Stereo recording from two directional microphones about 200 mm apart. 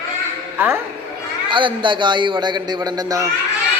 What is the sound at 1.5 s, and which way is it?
A man's voice, 25° right (ahead or behind).